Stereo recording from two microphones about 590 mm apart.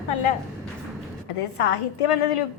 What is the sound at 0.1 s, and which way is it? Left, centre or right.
Speech, left.